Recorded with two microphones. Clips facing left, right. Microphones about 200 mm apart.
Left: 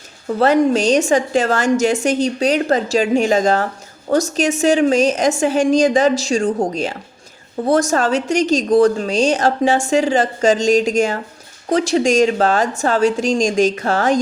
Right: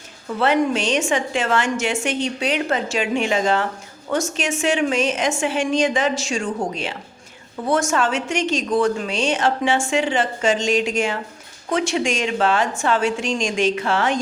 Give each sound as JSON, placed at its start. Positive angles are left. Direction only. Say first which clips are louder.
{"t": 0.3, "sound": "a woman's voice", "louder": "left 5 dB", "side_deg": 40}